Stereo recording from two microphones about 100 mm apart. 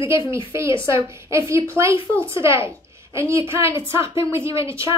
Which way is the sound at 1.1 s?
30° right (ahead or behind).